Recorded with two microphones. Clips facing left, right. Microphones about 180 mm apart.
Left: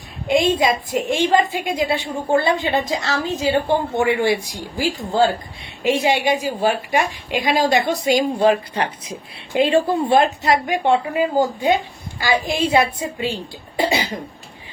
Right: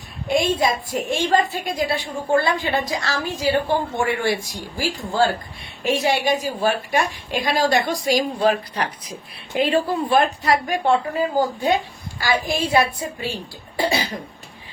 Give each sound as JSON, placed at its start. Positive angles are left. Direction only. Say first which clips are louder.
{"t": 0.4, "sound": "a woman's voice", "louder": "left 3 dB", "side_deg": 20}